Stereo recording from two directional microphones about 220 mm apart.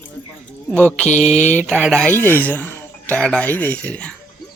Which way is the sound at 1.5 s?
Centre (ahead or behind).